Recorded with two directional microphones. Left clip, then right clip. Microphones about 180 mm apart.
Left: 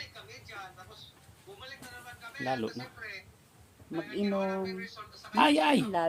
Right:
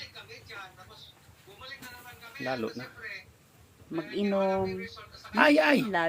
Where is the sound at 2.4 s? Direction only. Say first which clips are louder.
Even; 30° left (ahead or behind).